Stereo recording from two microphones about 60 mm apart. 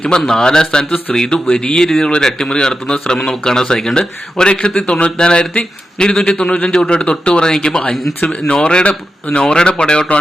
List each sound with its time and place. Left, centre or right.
0.0 s a man's voice: centre